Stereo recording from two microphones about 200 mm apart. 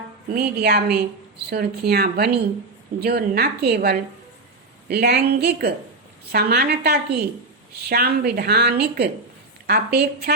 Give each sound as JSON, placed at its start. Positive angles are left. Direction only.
{"t": 0.3, "sound": "a woman's voice", "side_deg": -50}